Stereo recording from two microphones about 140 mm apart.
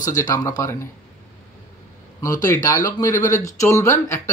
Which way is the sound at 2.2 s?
25° left (ahead or behind).